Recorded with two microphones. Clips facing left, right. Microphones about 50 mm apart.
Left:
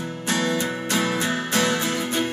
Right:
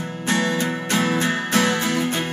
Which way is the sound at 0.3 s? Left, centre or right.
Right.